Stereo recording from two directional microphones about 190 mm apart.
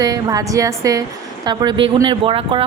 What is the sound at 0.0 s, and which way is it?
A woman's voice, 20° right (ahead or behind).